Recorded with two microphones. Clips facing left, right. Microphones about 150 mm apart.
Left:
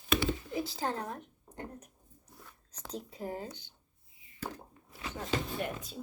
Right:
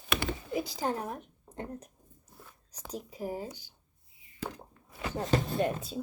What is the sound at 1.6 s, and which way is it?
Speech, 30° right (ahead or behind).